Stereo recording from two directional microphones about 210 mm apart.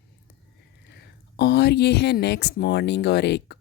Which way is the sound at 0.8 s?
50° left (ahead or behind).